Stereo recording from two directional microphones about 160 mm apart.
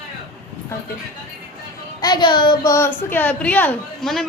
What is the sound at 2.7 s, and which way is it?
A man's voice, 15° left (ahead or behind).